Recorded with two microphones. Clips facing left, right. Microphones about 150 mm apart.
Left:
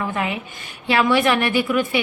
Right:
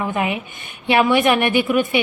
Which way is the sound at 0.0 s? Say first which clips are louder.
Right 3 dB; 20° right (ahead or behind).